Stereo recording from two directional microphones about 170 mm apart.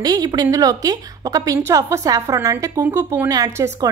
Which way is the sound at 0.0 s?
20° right (ahead or behind).